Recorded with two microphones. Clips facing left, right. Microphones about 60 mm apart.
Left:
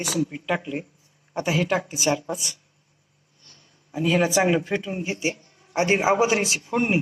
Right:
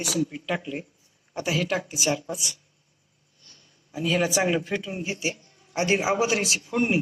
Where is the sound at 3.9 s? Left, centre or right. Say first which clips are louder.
Left 3 dB; left.